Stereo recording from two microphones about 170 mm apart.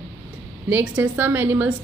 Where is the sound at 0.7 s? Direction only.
10° right (ahead or behind).